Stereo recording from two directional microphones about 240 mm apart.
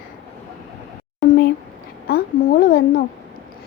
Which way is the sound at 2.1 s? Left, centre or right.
Left.